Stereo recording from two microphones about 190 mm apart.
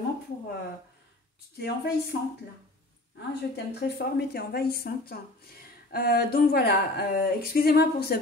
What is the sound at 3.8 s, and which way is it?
Speech, 55° left (ahead or behind).